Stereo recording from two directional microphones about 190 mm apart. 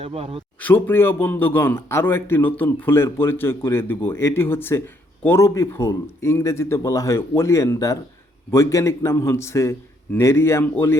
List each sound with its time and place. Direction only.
0.0 s speech: 30° right (ahead or behind)
0.6 s speech: 10° left (ahead or behind)